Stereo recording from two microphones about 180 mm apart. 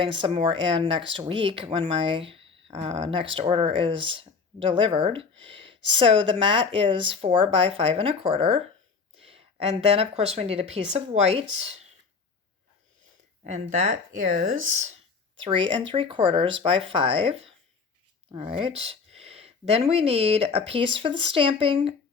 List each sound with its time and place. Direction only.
0.0 s speech: 30° right (ahead or behind)
13.4 s speech: 40° right (ahead or behind)
15.8 s speech: 30° right (ahead or behind)